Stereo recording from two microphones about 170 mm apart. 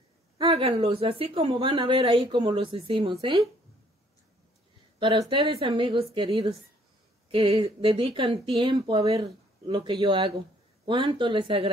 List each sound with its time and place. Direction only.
0.4 s speech: 30° right (ahead or behind)
4.9 s a sound: 30° right (ahead or behind)
5.3 s speech: 30° right (ahead or behind)